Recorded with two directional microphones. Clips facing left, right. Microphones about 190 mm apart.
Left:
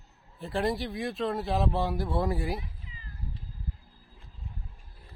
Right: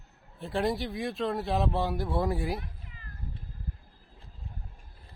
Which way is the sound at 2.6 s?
55° right (ahead or behind).